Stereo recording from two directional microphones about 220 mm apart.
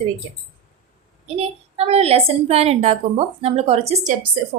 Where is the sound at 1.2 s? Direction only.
25° right (ahead or behind).